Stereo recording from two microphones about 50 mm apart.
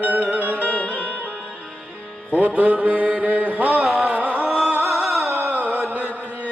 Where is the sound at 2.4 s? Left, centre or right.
Right.